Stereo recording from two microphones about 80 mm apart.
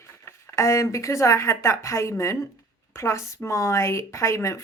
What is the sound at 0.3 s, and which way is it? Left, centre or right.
A woman's voice, left.